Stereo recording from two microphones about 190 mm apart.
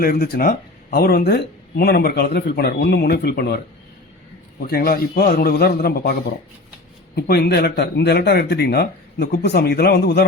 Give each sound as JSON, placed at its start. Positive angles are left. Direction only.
{"t": 0.0, "sound": "speech", "side_deg": 55}
{"t": 4.6, "sound": "speech", "side_deg": 55}
{"t": 7.2, "sound": "speech", "side_deg": 55}